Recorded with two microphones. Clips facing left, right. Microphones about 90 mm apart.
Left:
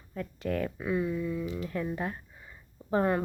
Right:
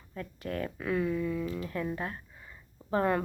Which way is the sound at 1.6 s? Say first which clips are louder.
Left 1 dB; 20° left (ahead or behind).